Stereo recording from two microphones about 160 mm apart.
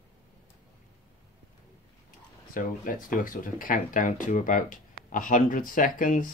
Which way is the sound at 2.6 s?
60° left (ahead or behind).